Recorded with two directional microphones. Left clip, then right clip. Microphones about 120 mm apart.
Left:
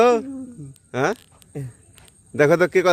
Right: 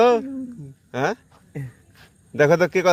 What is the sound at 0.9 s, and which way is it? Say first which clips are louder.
Speech: left 1 dB; 45° left (ahead or behind).